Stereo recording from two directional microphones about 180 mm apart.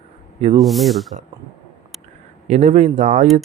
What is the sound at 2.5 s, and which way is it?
Speech, 40° right (ahead or behind).